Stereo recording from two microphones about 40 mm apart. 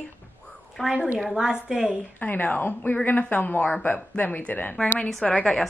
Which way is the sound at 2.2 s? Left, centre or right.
Left.